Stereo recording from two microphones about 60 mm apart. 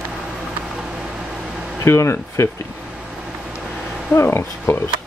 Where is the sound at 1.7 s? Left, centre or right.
Left.